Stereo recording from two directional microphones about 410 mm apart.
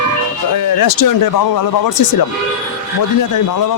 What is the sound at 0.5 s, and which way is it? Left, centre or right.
Speech, left.